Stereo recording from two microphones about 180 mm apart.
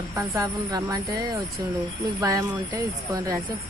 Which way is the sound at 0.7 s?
20° right (ahead or behind).